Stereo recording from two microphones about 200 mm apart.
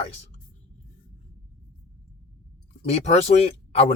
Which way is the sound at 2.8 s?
35° left (ahead or behind).